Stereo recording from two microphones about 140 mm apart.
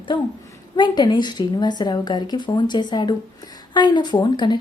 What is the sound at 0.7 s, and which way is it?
Speech, 30° left (ahead or behind).